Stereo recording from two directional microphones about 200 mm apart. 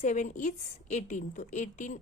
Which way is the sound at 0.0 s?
35° left (ahead or behind).